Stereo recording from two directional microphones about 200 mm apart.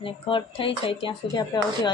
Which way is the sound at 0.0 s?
25° left (ahead or behind).